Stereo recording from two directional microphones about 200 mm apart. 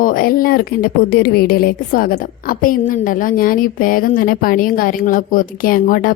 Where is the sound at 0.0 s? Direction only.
45° left (ahead or behind).